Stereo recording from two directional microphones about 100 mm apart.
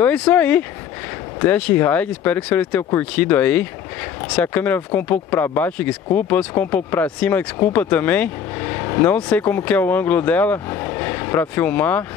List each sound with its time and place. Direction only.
0.0 s speech: 15° left (ahead or behind)